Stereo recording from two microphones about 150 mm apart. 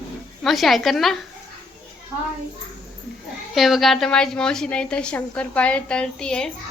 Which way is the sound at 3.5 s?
Centre (ahead or behind).